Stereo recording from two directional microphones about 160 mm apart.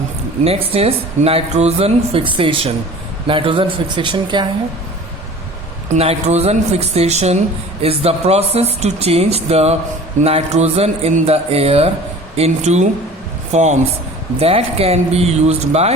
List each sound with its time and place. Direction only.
0.4 s speech: 40° right (ahead or behind)
5.9 s speech: 40° right (ahead or behind)